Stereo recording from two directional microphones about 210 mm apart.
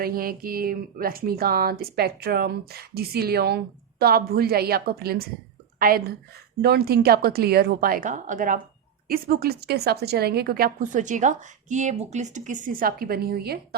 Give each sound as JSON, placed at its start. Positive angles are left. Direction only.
{"t": 0.0, "sound": "speech", "side_deg": -45}